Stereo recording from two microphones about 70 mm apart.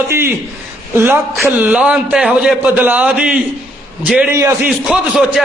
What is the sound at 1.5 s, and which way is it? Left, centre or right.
Speech, centre.